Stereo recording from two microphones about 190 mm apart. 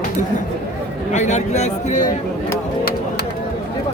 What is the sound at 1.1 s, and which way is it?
A man's voice, 35° left (ahead or behind).